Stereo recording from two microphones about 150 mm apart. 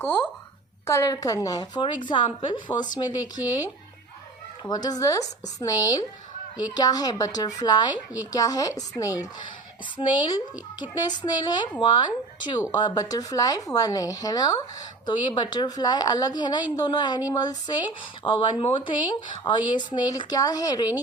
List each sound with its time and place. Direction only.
0.9 s a woman's voice: 20° left (ahead or behind)
4.7 s a woman's voice: 25° left (ahead or behind)
7.9 s a woman's voice: 10° right (ahead or behind)
8.3 s a woman's voice: 25° left (ahead or behind)
10.0 s a woman's voice: 35° left (ahead or behind)